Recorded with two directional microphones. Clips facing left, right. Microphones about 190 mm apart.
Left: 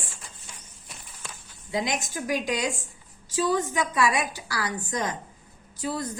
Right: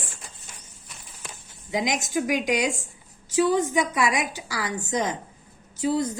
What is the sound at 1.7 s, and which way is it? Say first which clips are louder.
A woman's voice: right 3 dB; 20° right (ahead or behind).